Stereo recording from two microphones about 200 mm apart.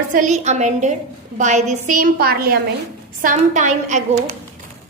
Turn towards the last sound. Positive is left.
turn(degrees=-40)  # may be behind; listen again after turning